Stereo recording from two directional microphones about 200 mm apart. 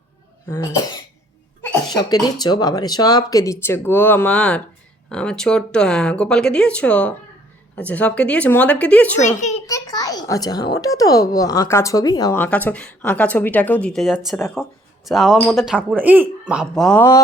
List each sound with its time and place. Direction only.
0.4 s a child's voice: 15° left (ahead or behind)
9.6 s a child's voice: 15° left (ahead or behind); by 17.0 s centre (ahead or behind)